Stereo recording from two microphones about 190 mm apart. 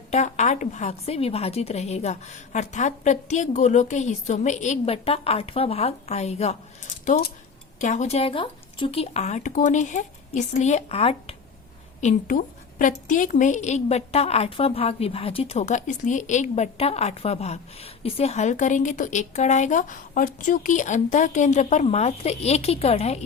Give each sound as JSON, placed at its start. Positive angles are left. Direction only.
{"t": 0.1, "sound": "a woman's voice", "side_deg": 40}